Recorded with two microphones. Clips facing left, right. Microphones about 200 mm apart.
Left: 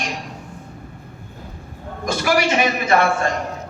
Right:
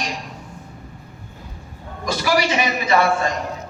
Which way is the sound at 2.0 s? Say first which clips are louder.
Left 1 dB; 55° left (ahead or behind).